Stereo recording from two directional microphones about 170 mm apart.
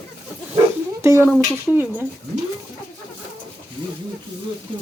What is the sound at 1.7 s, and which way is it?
Speech, 10° left (ahead or behind).